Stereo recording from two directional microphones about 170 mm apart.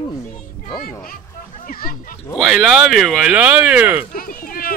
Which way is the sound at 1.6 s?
60° left (ahead or behind).